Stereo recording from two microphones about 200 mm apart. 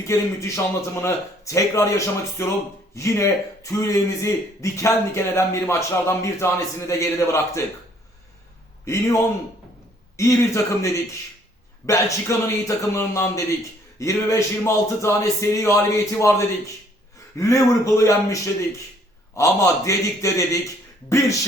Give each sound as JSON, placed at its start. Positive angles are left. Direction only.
{"t": 0.0, "sound": "a man's voice", "side_deg": 15}
{"t": 10.2, "sound": "a man's voice", "side_deg": 15}
{"t": 17.3, "sound": "a man's voice", "side_deg": 15}